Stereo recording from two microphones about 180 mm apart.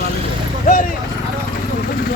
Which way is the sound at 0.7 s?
50° left (ahead or behind).